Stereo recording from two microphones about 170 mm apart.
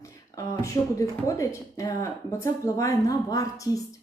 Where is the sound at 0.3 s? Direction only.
20° left (ahead or behind).